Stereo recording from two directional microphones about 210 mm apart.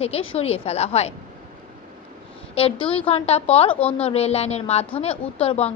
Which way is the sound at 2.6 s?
25° left (ahead or behind).